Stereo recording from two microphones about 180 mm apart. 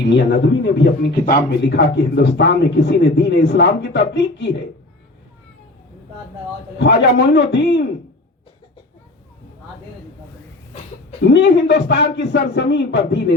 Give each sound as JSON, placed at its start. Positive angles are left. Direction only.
{"t": 0.1, "sound": "speech", "side_deg": 75}
{"t": 1.2, "sound": "speech", "side_deg": 65}
{"t": 6.7, "sound": "speech", "side_deg": 75}
{"t": 11.3, "sound": "speech", "side_deg": 75}